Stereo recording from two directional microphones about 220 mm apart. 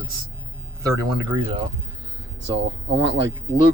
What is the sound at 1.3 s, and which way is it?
Speech, 25° right (ahead or behind).